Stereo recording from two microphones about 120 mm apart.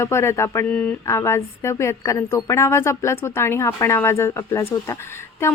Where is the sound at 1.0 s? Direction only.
20° left (ahead or behind).